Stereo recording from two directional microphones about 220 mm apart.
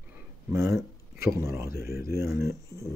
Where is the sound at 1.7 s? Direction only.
45° left (ahead or behind).